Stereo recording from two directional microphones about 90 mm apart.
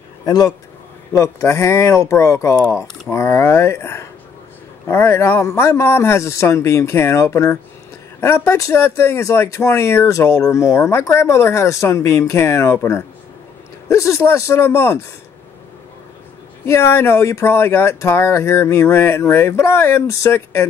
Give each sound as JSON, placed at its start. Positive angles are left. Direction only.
{"t": 0.2, "sound": "a man's voice", "side_deg": 45}
{"t": 1.1, "sound": "speech", "side_deg": 35}
{"t": 16.6, "sound": "speech", "side_deg": 30}